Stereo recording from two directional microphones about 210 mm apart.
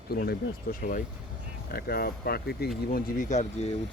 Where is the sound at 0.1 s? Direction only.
45° left (ahead or behind).